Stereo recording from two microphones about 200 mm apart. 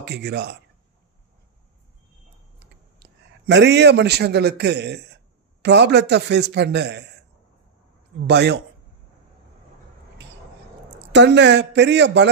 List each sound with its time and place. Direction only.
0.0 s a man's voice: 55° right (ahead or behind)
3.0 s a man's voice: 60° right (ahead or behind)
8.2 s a man's voice: 55° right (ahead or behind)
11.1 s a man's voice: 60° right (ahead or behind)